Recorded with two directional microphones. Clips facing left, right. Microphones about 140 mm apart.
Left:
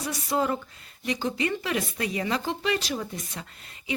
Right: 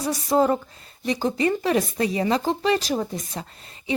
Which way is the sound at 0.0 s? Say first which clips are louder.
Right 7 dB; 40° right (ahead or behind).